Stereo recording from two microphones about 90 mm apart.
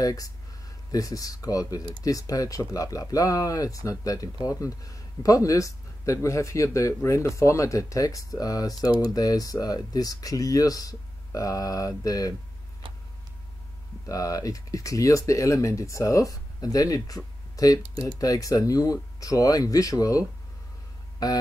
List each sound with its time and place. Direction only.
0.0 s speech: 40° left (ahead or behind)
12.8 s vehicle: 70° right (ahead or behind)
14.0 s speech: 40° left (ahead or behind)